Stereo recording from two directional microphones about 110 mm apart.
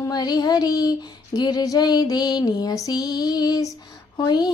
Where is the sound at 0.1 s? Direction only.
35° left (ahead or behind).